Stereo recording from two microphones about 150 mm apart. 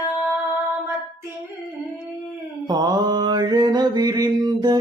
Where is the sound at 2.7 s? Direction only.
25° right (ahead or behind).